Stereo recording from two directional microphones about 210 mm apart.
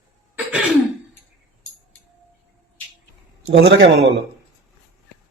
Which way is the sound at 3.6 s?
55° right (ahead or behind).